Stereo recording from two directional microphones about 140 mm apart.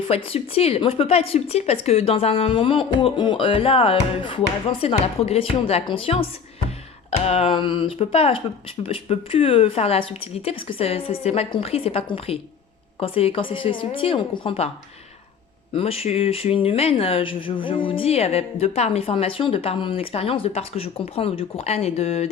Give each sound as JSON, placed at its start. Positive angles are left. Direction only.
{"t": 0.1, "sound": "speech", "side_deg": 45}
{"t": 7.3, "sound": "a woman's voice", "side_deg": 45}
{"t": 15.7, "sound": "speech", "side_deg": 45}